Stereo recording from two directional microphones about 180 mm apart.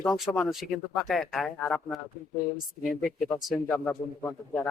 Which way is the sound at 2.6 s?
50° left (ahead or behind).